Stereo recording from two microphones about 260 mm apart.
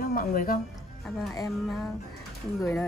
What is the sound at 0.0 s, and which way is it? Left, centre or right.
Speech, left.